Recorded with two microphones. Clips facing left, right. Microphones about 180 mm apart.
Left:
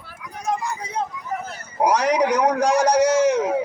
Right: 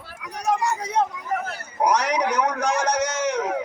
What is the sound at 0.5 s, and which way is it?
Vehicle, 90° right.